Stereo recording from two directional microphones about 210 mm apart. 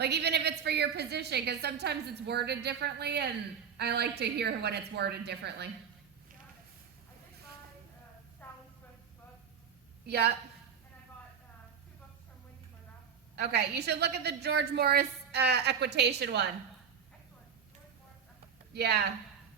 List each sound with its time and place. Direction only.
0.0 s a woman's voice: 50° right (ahead or behind)
10.1 s a woman's voice: 50° right (ahead or behind)
13.3 s a woman's voice: 50° right (ahead or behind)
18.7 s a woman's voice: 50° right (ahead or behind)